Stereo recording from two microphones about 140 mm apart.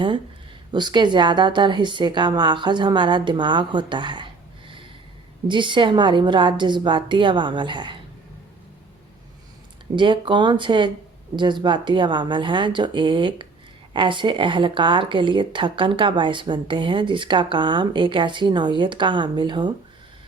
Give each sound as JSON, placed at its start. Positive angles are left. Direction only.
{"t": 0.7, "sound": "speech", "side_deg": -30}
{"t": 5.5, "sound": "speech", "side_deg": -35}
{"t": 9.9, "sound": "speech", "side_deg": -35}